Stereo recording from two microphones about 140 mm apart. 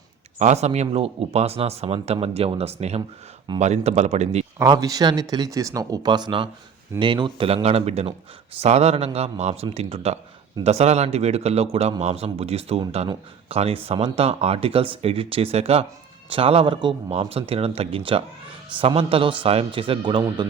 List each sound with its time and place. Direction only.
0.3 s a man's voice: 55° right (ahead or behind)
4.5 s a man's voice: 25° right (ahead or behind)